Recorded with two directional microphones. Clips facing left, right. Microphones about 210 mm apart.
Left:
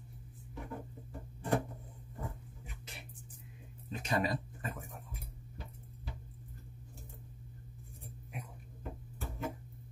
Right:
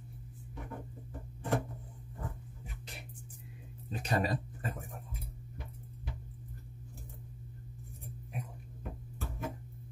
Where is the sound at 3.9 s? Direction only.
35° right (ahead or behind).